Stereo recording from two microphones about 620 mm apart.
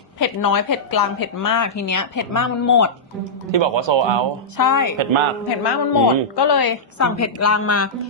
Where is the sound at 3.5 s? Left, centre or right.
Right.